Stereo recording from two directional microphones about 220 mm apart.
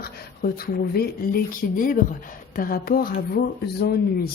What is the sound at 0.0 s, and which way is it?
A woman's voice, 45° left (ahead or behind).